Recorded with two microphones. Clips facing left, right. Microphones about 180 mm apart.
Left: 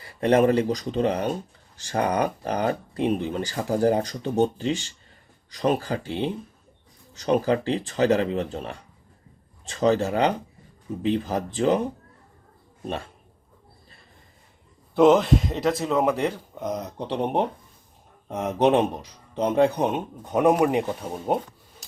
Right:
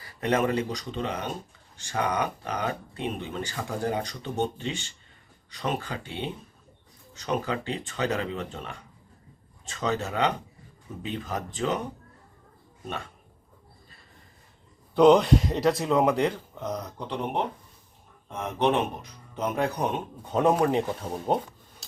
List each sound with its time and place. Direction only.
0.0 s speech: 30° left (ahead or behind)
14.9 s speech: 5° left (ahead or behind)
17.0 s speech: 35° left (ahead or behind)
19.4 s speech: 25° left (ahead or behind); by 21.3 s 10° left (ahead or behind)